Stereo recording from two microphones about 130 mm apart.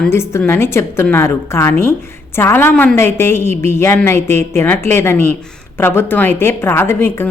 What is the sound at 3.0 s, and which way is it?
A woman's voice, 20° left (ahead or behind).